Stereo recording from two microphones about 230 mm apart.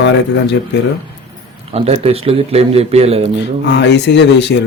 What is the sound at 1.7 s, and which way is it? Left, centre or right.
A man's voice, right.